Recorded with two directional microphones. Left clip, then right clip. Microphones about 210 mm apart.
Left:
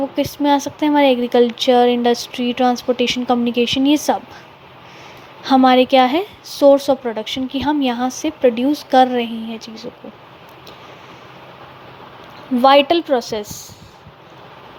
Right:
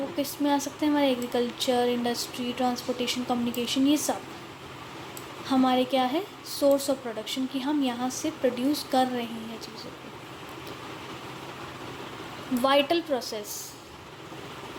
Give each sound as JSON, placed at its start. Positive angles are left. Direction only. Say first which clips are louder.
{"t": 0.2, "sound": "a woman's voice", "louder": "left 10 dB", "side_deg": 35}
{"t": 5.5, "sound": "a woman's voice", "louder": "left 13 dB", "side_deg": 40}
{"t": 12.6, "sound": "a woman's voice", "louder": "left 12 dB", "side_deg": 35}